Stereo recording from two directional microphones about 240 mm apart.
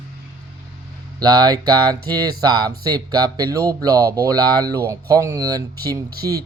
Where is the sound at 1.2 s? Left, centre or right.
Centre.